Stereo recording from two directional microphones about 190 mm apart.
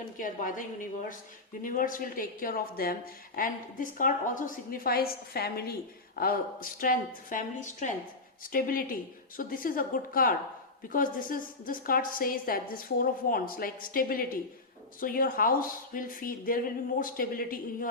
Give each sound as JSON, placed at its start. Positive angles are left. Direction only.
{"t": 0.2, "sound": "speech", "side_deg": 45}